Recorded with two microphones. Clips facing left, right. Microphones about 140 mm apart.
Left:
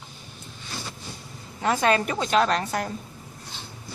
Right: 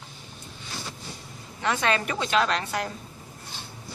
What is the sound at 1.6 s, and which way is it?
A woman's voice, 40° left (ahead or behind).